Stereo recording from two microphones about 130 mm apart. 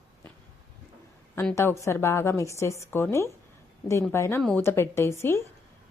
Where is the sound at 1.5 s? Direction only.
20° left (ahead or behind).